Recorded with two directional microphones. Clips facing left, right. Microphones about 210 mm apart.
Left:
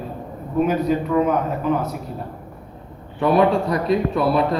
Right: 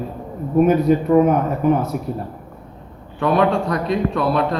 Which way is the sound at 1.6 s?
55° right (ahead or behind).